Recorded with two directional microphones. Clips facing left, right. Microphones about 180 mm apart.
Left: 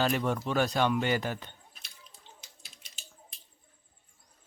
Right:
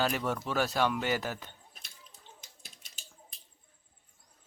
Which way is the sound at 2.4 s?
45° right (ahead or behind).